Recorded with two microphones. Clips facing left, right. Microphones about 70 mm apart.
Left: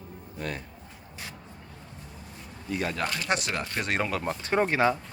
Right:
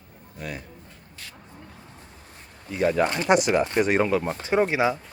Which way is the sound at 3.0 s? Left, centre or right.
Right.